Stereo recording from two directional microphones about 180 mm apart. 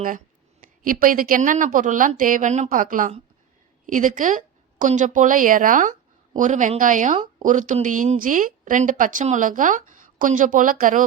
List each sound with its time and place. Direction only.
0.6 s speech: 50° right (ahead or behind)